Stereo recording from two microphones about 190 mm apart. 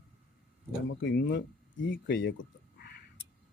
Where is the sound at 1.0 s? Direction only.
65° left (ahead or behind).